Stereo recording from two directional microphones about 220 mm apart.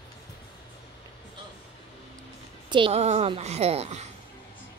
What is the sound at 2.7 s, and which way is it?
A woman's voice, 25° right (ahead or behind).